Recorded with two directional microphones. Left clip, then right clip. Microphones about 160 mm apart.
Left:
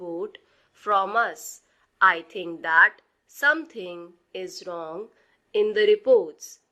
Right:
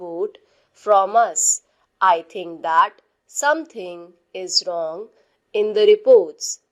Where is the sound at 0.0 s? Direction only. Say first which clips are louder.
Right 6 dB; 20° right (ahead or behind).